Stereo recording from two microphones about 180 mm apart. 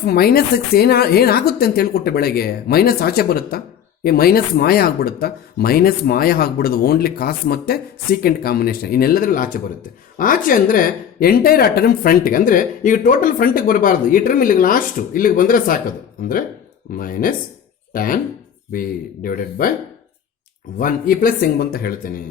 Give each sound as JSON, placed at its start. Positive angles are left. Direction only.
{"t": 0.0, "sound": "a woman's voice", "side_deg": 60}
{"t": 16.9, "sound": "a woman's voice", "side_deg": 50}
{"t": 20.7, "sound": "a woman's voice", "side_deg": 50}